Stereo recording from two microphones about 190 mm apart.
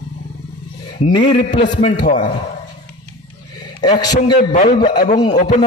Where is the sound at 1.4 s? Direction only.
40° left (ahead or behind).